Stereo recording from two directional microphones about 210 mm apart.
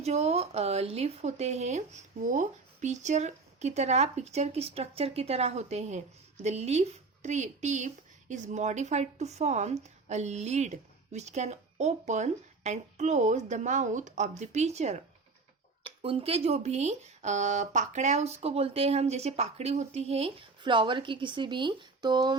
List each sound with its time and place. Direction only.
0.0 s speech: 30° right (ahead or behind)